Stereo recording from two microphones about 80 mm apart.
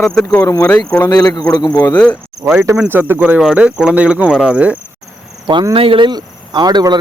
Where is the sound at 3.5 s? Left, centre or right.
Centre.